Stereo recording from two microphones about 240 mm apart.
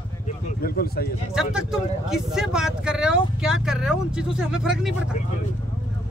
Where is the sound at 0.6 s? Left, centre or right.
Left.